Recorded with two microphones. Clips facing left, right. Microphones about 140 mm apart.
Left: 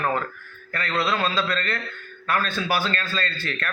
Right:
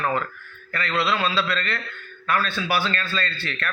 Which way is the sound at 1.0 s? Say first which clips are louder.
Right 1 dB; 45° left (ahead or behind).